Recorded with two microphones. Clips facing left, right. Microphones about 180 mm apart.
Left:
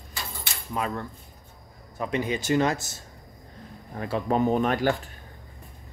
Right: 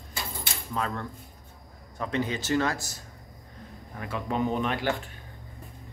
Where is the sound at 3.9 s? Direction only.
35° left (ahead or behind).